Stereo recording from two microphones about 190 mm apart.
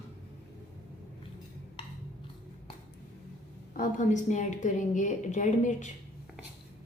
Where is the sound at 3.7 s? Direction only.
45° left (ahead or behind).